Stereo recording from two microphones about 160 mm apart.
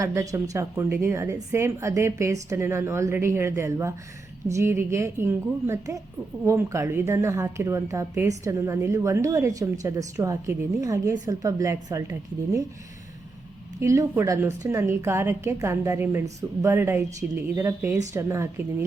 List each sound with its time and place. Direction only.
0.0 s a woman's voice: 20° right (ahead or behind)
13.8 s a woman's voice: 20° right (ahead or behind)